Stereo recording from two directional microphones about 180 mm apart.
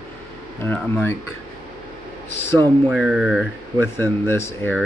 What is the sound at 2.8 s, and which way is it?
Speech, 5° right (ahead or behind).